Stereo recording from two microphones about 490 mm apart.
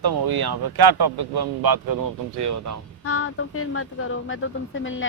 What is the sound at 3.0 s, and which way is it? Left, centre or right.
Speech, left.